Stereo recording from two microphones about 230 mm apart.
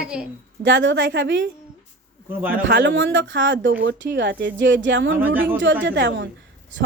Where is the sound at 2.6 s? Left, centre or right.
Right.